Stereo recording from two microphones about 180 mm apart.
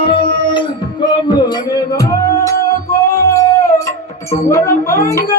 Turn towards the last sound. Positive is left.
turn(degrees=15)  # may be behind; listen again after turning